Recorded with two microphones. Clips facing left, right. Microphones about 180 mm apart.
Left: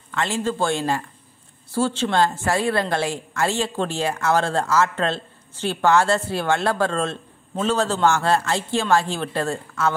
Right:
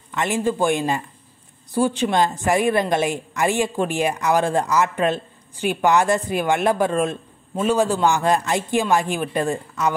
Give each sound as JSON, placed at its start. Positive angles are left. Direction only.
{"t": 0.1, "sound": "a woman's voice", "side_deg": -15}